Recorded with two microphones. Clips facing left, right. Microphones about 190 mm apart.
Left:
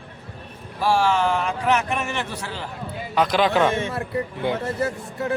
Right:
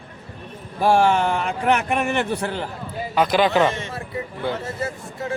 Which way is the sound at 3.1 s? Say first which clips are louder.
Right 1 dB; 5° right (ahead or behind).